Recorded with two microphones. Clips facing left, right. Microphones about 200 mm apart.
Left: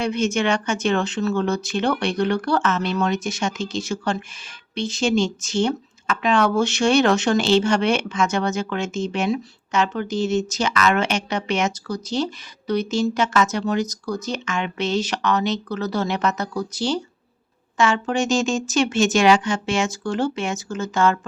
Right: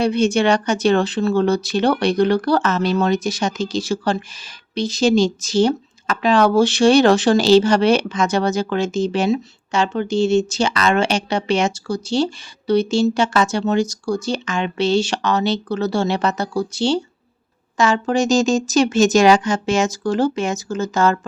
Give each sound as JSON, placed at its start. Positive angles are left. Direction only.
{"t": 0.0, "sound": "speech", "side_deg": -35}